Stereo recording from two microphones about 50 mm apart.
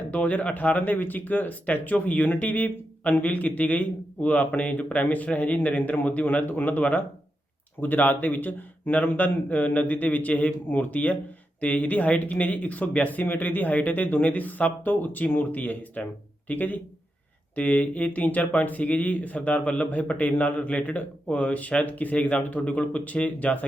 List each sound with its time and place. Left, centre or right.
0.1 s speech: left